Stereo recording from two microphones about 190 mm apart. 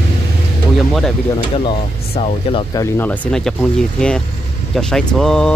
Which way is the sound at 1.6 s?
30° left (ahead or behind).